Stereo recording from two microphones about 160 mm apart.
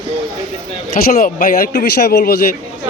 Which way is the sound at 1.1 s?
60° left (ahead or behind).